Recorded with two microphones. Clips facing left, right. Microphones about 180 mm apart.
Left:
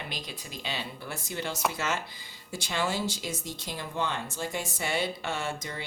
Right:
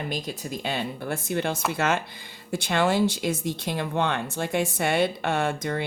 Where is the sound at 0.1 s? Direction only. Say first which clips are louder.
Right 9 dB; 45° right (ahead or behind).